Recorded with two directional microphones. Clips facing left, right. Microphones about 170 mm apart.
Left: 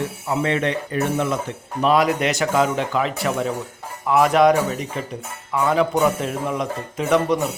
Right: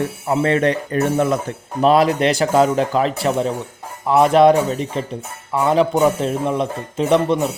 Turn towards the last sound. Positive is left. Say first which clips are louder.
# right 3 dB
turn(degrees=-30)  # may be behind; listen again after turning